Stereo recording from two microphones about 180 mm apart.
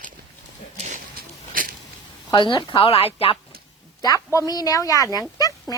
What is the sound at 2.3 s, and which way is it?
Speech, 25° left (ahead or behind).